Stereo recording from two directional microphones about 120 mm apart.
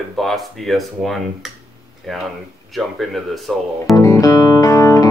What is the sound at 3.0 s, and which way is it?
Music, centre (ahead or behind).